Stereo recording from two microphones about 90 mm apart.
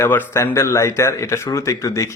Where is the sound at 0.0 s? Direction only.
20° left (ahead or behind).